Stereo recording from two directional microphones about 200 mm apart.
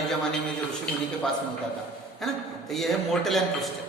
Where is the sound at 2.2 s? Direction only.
Centre (ahead or behind).